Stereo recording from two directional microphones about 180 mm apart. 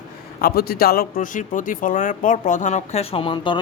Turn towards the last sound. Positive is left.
turn(degrees=25)  # may be behind; listen again after turning